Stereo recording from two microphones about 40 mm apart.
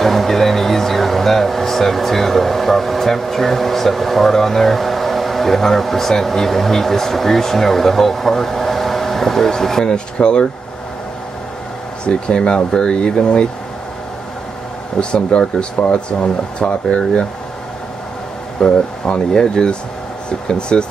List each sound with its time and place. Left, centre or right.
0.0 s speech: centre
9.9 s speech: left
12.0 s speech: left
15.0 s speech: left
18.6 s speech: left